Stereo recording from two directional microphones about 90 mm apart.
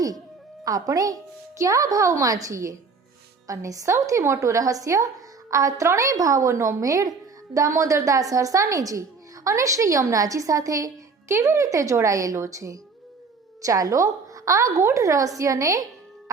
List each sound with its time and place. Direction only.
0.6 s a woman's voice: 40° right (ahead or behind)